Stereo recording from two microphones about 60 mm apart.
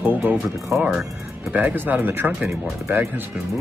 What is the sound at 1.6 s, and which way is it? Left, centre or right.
Speech, right.